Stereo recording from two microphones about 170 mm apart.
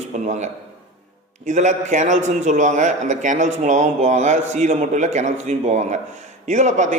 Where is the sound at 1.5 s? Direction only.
45° right (ahead or behind).